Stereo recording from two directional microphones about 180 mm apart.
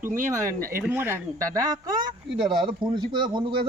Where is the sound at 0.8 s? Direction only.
10° right (ahead or behind).